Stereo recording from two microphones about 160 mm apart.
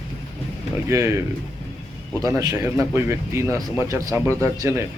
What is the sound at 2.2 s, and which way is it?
Speech, 20° right (ahead or behind).